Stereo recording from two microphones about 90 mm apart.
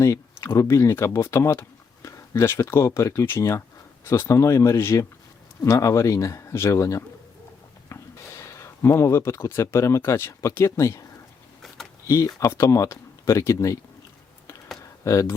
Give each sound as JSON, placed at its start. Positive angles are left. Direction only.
{"t": 0.0, "sound": "speech", "side_deg": 30}
{"t": 8.4, "sound": "speech", "side_deg": 30}
{"t": 12.0, "sound": "speech", "side_deg": 35}
{"t": 15.0, "sound": "speech", "side_deg": 35}